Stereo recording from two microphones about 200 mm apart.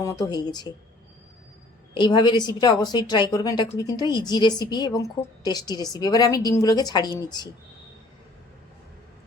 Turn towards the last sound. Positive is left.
turn(degrees=20)  # may be behind; listen again after turning